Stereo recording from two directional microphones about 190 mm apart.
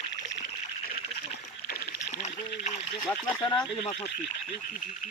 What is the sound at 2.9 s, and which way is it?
Speech, 15° left (ahead or behind).